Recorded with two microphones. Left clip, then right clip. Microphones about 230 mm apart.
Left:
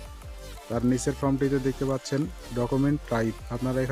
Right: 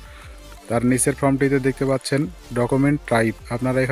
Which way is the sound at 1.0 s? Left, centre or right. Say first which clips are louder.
Right 7 dB; right.